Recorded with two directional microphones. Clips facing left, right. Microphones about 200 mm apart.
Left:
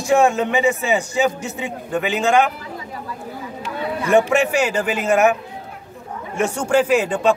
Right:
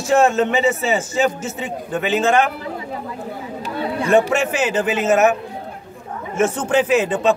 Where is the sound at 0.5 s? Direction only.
15° left (ahead or behind).